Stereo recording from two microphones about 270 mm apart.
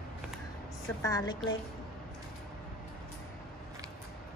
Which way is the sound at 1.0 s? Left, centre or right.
Centre.